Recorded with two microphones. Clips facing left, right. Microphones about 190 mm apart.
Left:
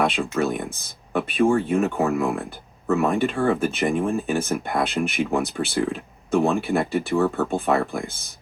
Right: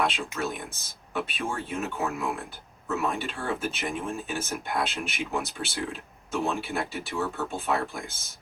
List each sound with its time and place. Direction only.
0.0 s speech: 55° left (ahead or behind)